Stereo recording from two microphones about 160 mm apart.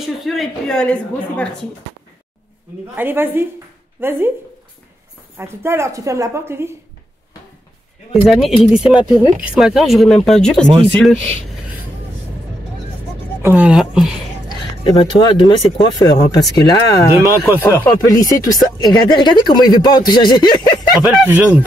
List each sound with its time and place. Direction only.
0.0 s a woman's voice: centre (ahead or behind)
3.0 s a woman's voice: 15° right (ahead or behind)
5.4 s a woman's voice: 15° right (ahead or behind)
8.1 s speech: centre (ahead or behind)
13.4 s speech: 10° right (ahead or behind)
14.8 s speech: 30° left (ahead or behind)
21.3 s a woman's voice: 10° right (ahead or behind)